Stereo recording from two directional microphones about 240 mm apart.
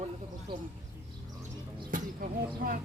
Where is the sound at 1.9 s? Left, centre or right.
Right.